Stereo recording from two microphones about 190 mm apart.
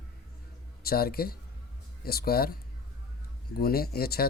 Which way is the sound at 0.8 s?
50° left (ahead or behind).